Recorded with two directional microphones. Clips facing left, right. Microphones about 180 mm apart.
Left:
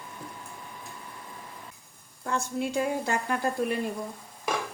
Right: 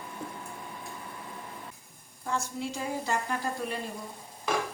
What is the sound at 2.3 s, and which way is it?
Speech, 60° left (ahead or behind).